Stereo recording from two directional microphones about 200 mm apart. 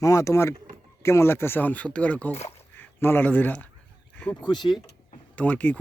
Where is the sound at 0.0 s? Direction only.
15° left (ahead or behind).